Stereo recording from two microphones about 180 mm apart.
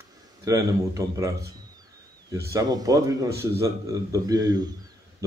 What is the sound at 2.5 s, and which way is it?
A man's voice, 20° right (ahead or behind).